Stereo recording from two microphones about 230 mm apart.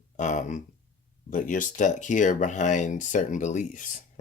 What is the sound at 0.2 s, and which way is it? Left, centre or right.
Speech, left.